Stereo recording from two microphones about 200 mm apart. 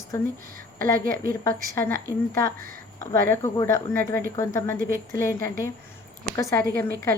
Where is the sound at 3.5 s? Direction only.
15° left (ahead or behind).